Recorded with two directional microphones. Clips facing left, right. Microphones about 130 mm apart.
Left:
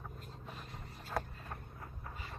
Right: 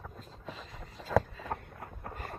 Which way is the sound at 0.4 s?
90° right.